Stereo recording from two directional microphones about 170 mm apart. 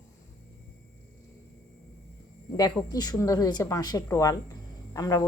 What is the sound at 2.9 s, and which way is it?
Speech, 20° left (ahead or behind).